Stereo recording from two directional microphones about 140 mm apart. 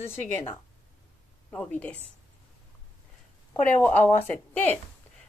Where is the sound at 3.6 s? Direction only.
10° left (ahead or behind).